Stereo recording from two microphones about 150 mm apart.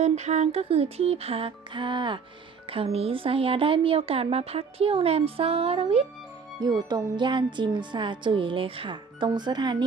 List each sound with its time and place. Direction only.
0.0 s speech: 50° right (ahead or behind)
6.6 s speech: 30° right (ahead or behind)